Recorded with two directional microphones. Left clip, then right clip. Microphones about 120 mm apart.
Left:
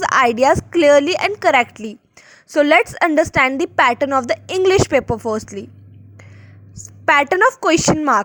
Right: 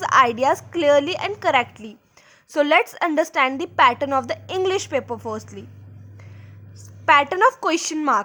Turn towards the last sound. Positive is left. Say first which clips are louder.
# left 6 dB
turn(degrees=35)  # may be behind; listen again after turning